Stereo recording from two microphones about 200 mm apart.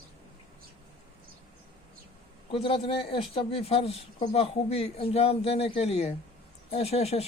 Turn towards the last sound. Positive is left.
turn(degrees=30)  # may be behind; listen again after turning